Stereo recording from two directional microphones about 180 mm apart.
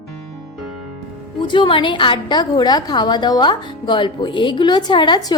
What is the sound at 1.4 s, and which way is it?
A woman's voice, 25° left (ahead or behind).